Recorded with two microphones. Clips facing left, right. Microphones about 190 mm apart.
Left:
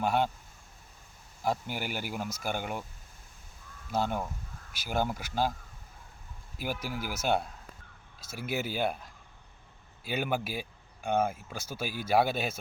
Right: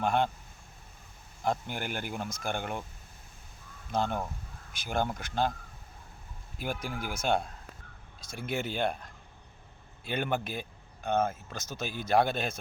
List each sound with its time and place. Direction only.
0.0 s speech: 5° left (ahead or behind)
1.5 s speech: 5° left (ahead or behind)
3.9 s speech: 10° left (ahead or behind)
6.8 s speech: 5° left (ahead or behind)